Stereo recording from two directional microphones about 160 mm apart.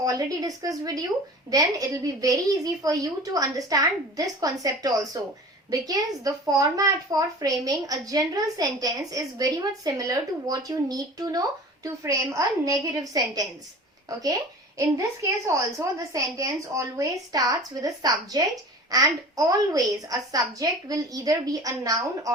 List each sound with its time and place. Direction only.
0.0 s a woman's voice: 20° right (ahead or behind)